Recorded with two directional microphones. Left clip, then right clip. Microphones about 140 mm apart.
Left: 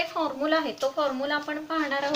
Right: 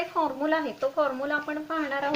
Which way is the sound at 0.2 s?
20° right (ahead or behind).